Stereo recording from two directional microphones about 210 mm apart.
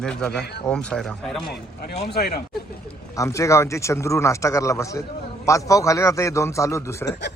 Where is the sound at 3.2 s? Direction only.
15° left (ahead or behind).